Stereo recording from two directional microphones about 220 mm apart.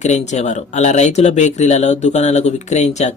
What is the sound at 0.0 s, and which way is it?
Speech, 30° left (ahead or behind).